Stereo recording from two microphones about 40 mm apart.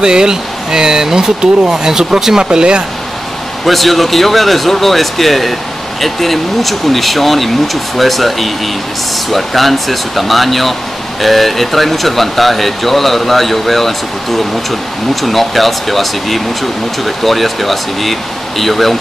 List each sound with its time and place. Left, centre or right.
0.0 s speech: centre
3.6 s speech: centre